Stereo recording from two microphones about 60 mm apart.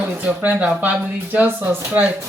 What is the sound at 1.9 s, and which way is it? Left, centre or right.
Speech, right.